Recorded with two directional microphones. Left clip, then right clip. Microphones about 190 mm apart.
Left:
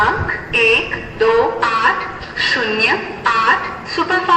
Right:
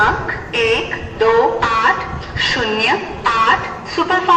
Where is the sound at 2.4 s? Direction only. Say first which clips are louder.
Left 1 dB; 20° left (ahead or behind).